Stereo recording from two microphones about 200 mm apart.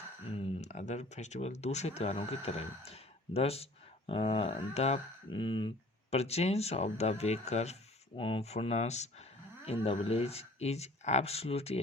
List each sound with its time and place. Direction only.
0.3 s speech: 30° left (ahead or behind)